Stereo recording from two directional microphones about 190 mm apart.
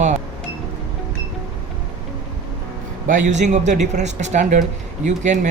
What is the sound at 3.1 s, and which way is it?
A man's voice, 40° right (ahead or behind).